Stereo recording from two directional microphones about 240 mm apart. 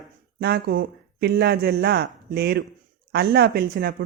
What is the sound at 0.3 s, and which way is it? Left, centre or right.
Speech, right.